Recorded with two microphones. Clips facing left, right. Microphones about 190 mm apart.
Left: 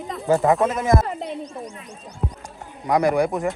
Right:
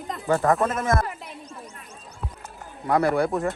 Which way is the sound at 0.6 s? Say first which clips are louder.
Left 3 dB; centre (ahead or behind).